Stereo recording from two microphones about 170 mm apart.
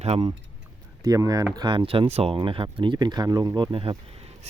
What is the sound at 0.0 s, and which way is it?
Speech, 40° right (ahead or behind).